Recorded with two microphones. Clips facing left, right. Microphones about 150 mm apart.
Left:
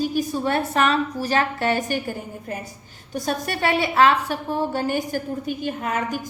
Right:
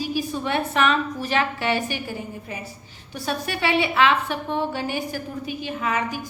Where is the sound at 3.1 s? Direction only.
45° left (ahead or behind).